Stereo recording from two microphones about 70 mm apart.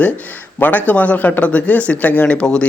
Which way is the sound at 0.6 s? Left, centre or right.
Left.